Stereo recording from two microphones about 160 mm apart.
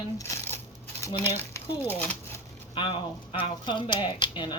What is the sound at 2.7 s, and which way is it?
Speech, 30° left (ahead or behind).